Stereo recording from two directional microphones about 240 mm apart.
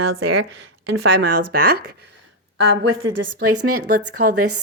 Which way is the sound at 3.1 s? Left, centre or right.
Right.